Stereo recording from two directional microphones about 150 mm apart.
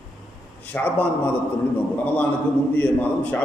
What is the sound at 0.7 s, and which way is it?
Speech, 10° left (ahead or behind).